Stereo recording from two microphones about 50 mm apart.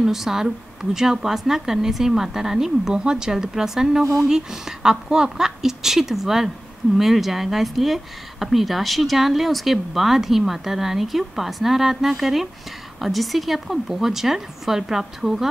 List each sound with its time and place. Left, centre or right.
0.0 s a woman's voice: centre
4.0 s speech: right
4.3 s a woman's voice: centre